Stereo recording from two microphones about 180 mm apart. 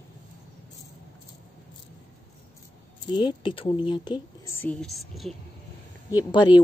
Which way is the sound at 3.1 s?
25° left (ahead or behind).